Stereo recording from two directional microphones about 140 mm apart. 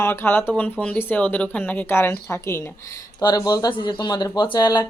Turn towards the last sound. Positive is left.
turn(degrees=30)  # may be behind; listen again after turning